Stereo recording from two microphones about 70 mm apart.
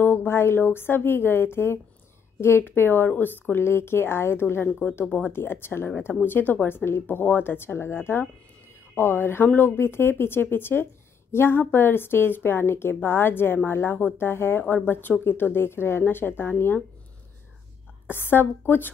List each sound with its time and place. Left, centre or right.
0.0 s a woman's voice: left
4.6 s speech: centre
5.3 s a woman's voice: left
18.1 s a woman's voice: left